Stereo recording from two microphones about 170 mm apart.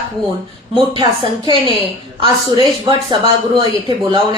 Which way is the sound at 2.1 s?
30° right (ahead or behind).